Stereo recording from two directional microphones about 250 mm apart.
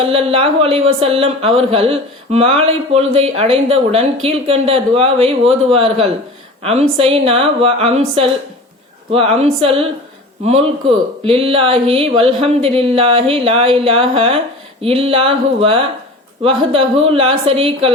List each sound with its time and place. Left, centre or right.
0.0 s speech: right